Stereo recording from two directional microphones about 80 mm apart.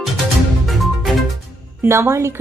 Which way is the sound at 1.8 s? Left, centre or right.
Right.